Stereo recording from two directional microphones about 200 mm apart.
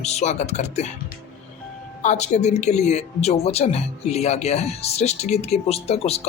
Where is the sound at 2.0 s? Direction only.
35° left (ahead or behind).